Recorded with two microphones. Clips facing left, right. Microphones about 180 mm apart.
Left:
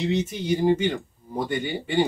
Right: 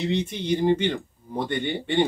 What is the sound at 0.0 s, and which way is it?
Speech, 5° left (ahead or behind).